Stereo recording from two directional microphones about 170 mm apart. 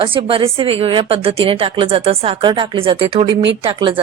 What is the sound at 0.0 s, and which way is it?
Speech, 30° right (ahead or behind).